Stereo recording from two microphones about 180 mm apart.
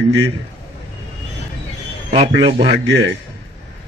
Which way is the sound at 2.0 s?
35° right (ahead or behind).